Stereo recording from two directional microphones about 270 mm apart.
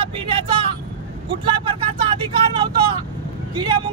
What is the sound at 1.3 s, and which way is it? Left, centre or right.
Speech, centre.